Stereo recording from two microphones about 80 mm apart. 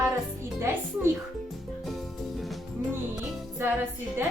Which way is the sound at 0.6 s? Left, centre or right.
Right.